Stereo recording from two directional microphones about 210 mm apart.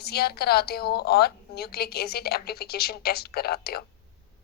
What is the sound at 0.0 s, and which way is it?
A woman's voice, 50° left (ahead or behind).